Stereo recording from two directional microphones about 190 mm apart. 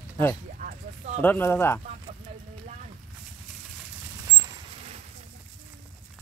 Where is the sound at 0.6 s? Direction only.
45° right (ahead or behind).